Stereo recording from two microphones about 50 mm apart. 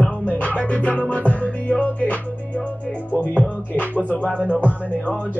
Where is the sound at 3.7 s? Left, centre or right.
Right.